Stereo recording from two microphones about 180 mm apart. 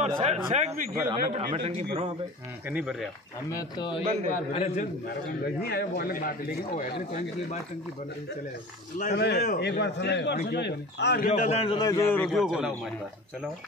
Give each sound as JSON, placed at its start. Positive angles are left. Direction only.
{"t": 0.0, "sound": "a man's voice", "side_deg": -35}
{"t": 2.7, "sound": "a man's voice", "side_deg": -5}
{"t": 3.4, "sound": "speech", "side_deg": 20}
{"t": 4.3, "sound": "a man's voice", "side_deg": 40}
{"t": 5.6, "sound": "speech", "side_deg": 60}
{"t": 9.1, "sound": "a man's voice", "side_deg": 65}
{"t": 11.2, "sound": "a man's voice", "side_deg": 45}
{"t": 11.7, "sound": "speech", "side_deg": 20}
{"t": 12.1, "sound": "a man's voice", "side_deg": 5}